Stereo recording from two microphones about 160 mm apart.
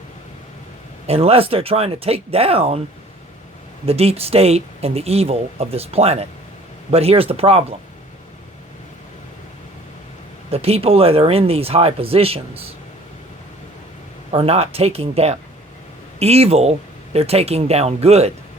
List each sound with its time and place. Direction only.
1.0 s speech: 40° right (ahead or behind)
3.8 s speech: 40° right (ahead or behind)
10.5 s speech: 40° right (ahead or behind)
14.3 s speech: 40° right (ahead or behind)